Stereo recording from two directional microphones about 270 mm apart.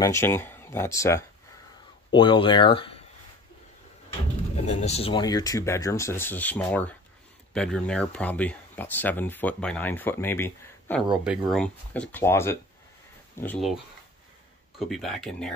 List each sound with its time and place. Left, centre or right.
0.0 s speech: centre
4.6 s speech: left; by 13.7 s centre
14.8 s speech: centre